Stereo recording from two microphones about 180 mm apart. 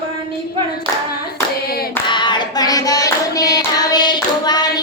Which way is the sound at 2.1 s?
25° left (ahead or behind).